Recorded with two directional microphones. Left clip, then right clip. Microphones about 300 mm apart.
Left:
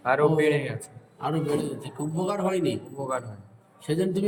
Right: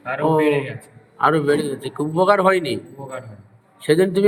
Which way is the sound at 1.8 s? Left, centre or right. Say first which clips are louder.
Right 12 dB; right.